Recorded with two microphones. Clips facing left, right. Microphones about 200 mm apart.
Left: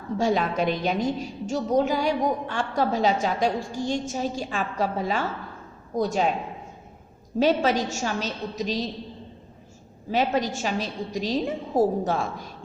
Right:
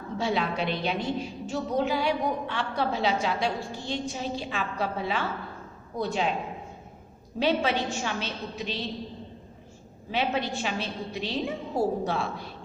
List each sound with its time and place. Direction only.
0.2 s a woman's voice: 45° left (ahead or behind)
7.3 s a woman's voice: 45° left (ahead or behind)
10.1 s a woman's voice: 40° left (ahead or behind)